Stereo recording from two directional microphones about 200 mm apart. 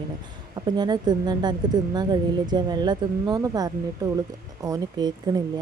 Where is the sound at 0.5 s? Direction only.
20° right (ahead or behind).